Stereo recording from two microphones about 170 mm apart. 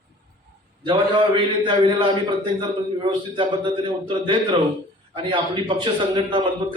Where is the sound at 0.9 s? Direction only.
30° right (ahead or behind).